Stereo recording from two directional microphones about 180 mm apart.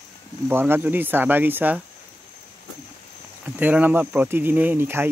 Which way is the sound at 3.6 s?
10° right (ahead or behind).